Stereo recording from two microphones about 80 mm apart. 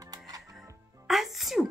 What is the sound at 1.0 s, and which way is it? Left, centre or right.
Music, centre.